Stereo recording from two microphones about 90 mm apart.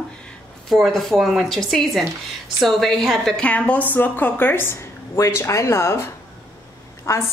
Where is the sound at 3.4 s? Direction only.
15° left (ahead or behind).